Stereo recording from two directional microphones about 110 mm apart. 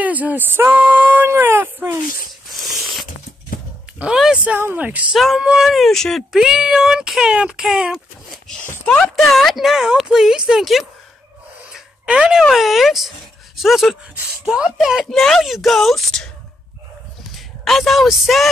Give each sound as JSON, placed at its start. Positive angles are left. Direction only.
{"t": 0.0, "sound": "speech", "side_deg": -15}
{"t": 2.6, "sound": "a sound", "side_deg": 0}
{"t": 4.0, "sound": "speech", "side_deg": -5}
{"t": 4.5, "sound": "speech", "side_deg": -20}
{"t": 5.1, "sound": "speech", "side_deg": 0}
{"t": 8.5, "sound": "speech", "side_deg": 10}
{"t": 17.3, "sound": "speech", "side_deg": 0}